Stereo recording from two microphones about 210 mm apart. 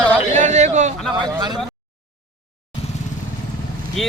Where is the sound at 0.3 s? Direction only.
35° right (ahead or behind).